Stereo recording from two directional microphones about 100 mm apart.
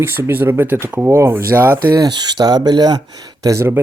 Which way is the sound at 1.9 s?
45° right (ahead or behind).